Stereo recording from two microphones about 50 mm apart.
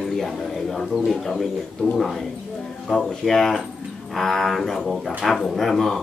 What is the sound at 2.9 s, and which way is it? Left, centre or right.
A man's voice, centre.